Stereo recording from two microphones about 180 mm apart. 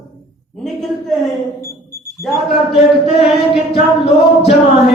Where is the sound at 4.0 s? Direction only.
30° left (ahead or behind).